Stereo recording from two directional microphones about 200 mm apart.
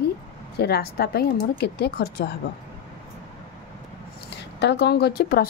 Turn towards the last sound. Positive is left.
turn(degrees=50)  # may be behind; listen again after turning